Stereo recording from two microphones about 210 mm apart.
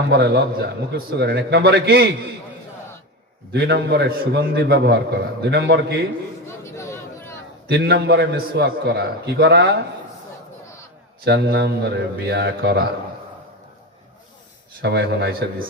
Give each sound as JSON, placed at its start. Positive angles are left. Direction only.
{"t": 0.1, "sound": "a man's voice", "side_deg": -50}
{"t": 3.5, "sound": "a man's voice", "side_deg": -55}
{"t": 6.7, "sound": "a sound", "side_deg": 15}
{"t": 7.7, "sound": "a man's voice", "side_deg": -55}
{"t": 11.3, "sound": "a man's voice", "side_deg": -55}
{"t": 14.8, "sound": "a man's voice", "side_deg": -55}